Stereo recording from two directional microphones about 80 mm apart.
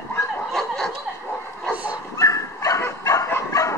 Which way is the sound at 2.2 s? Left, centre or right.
Left.